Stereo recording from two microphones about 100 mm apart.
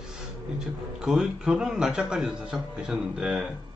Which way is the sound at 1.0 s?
5° right (ahead or behind).